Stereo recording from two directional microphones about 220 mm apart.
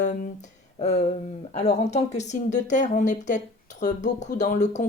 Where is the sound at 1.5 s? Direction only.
30° left (ahead or behind).